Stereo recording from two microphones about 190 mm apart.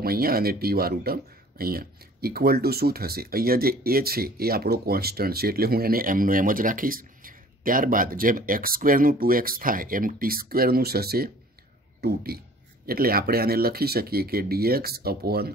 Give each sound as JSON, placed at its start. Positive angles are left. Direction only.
{"t": 0.0, "sound": "speech", "side_deg": -50}